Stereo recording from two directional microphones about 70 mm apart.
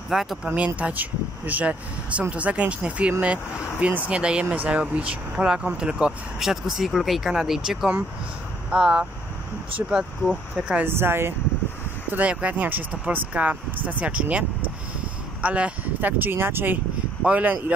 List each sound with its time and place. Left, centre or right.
0.1 s speech: centre
0.7 s speech: right
10.9 s speech: right
12.1 s speech: centre
15.4 s speech: centre